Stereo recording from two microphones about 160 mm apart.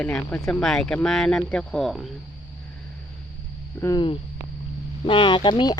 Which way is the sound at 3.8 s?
25° left (ahead or behind).